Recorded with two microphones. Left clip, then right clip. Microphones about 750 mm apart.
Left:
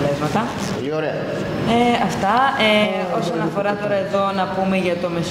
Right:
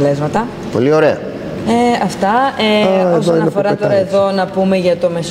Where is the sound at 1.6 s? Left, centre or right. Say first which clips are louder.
Right 4 dB; right.